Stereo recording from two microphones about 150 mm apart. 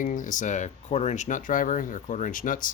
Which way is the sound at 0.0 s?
60° left (ahead or behind).